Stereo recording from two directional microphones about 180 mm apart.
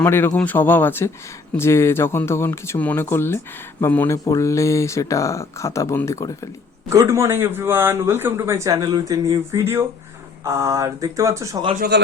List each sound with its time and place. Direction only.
0.0 s speech: 10° left (ahead or behind)
6.9 s speech: 15° right (ahead or behind)
11.8 s a man's voice: 70° right (ahead or behind)